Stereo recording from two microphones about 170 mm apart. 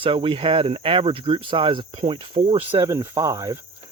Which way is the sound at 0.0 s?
30° right (ahead or behind).